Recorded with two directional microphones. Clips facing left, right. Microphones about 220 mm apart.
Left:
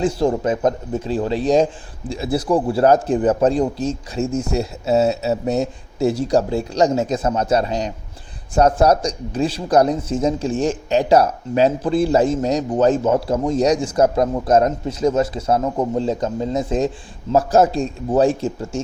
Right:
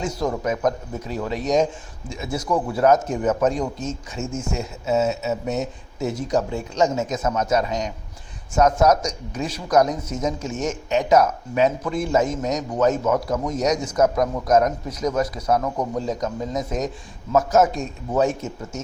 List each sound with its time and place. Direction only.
0.0 s speech: 30° left (ahead or behind)